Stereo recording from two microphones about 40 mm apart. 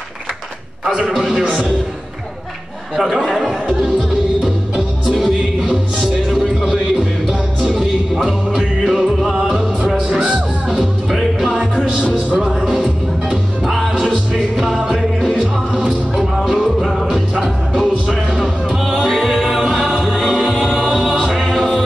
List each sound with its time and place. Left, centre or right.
1.1 s a man's voice: centre
3.0 s speech: centre
5.0 s music: centre
5.9 s music: centre
7.7 s music: centre
11.1 s music: centre
12.6 s music: centre
14.3 s music: centre
16.2 s music: centre
18.0 s music: centre
19.0 s music: centre
20.2 s a capella: centre
20.6 s choir: centre
21.3 s music: centre